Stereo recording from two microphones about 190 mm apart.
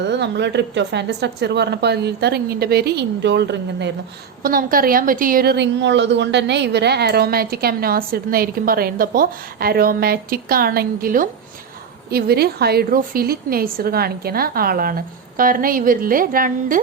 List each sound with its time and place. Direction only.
0.0 s a woman's voice: 65° right (ahead or behind)
4.4 s a woman's voice: 50° right (ahead or behind)